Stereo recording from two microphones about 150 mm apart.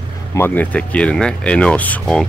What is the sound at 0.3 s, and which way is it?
Speech, 15° left (ahead or behind).